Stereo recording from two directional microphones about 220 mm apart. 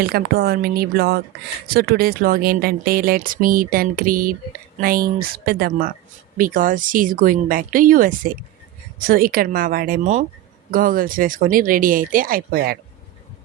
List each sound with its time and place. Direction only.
0.0 s speech: 45° right (ahead or behind)